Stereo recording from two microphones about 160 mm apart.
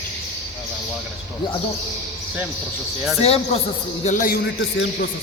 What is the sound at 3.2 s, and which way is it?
Speech, 40° left (ahead or behind).